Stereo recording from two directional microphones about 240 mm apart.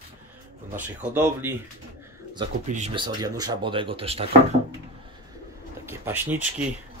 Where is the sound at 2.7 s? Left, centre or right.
Right.